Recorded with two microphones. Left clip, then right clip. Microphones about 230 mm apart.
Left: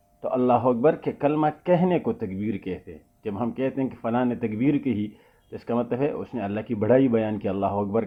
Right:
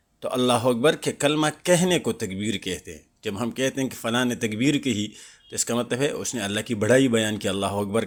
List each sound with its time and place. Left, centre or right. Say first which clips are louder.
0.2 s a man's voice: left 1 dB; right